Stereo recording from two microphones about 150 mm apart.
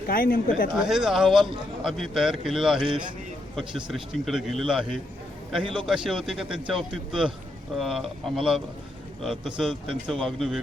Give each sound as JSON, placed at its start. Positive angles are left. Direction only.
{"t": 0.1, "sound": "speech", "side_deg": 75}
{"t": 0.8, "sound": "a man's voice", "side_deg": -5}
{"t": 3.8, "sound": "a man's voice", "side_deg": 0}